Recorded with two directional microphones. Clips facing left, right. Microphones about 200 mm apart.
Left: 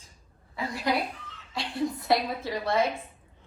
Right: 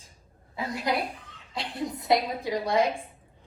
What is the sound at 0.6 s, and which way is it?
A woman's voice, 20° right (ahead or behind).